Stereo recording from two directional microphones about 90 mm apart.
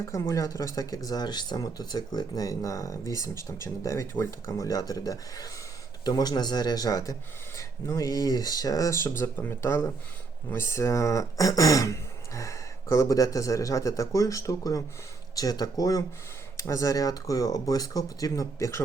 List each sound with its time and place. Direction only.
0.1 s speech: 35° left (ahead or behind)